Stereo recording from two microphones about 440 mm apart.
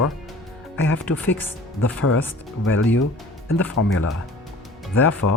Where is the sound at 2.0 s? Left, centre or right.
Left.